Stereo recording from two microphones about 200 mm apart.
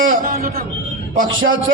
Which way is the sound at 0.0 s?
45° right (ahead or behind).